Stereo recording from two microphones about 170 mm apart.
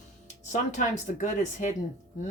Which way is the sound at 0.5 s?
45° left (ahead or behind).